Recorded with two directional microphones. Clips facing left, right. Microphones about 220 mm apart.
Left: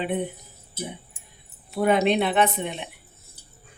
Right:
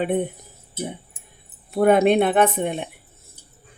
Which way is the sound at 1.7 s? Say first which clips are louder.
Right 5 dB; 50° right (ahead or behind).